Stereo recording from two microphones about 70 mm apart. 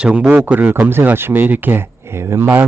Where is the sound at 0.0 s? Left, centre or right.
Centre.